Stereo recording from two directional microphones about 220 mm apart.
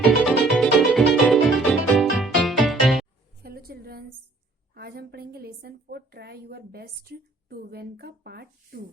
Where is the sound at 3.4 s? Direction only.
45° right (ahead or behind).